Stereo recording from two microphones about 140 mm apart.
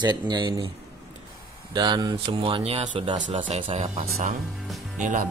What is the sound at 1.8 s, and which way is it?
Speech, 30° right (ahead or behind).